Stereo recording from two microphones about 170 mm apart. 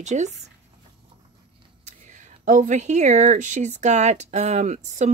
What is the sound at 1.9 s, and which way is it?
Speech, 45° right (ahead or behind).